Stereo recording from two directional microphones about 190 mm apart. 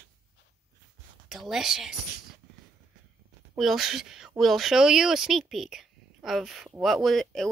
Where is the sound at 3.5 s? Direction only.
Centre (ahead or behind).